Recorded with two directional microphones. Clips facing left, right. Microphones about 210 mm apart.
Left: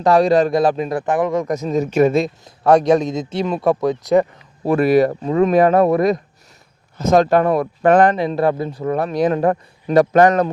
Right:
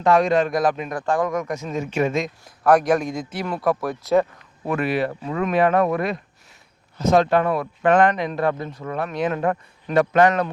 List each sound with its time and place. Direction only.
0.0 s speech: 35° left (ahead or behind)
1.5 s speech: 40° left (ahead or behind); by 4.3 s 15° left (ahead or behind)
4.6 s speech: 35° left (ahead or behind)